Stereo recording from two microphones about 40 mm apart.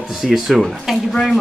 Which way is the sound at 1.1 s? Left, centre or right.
Centre.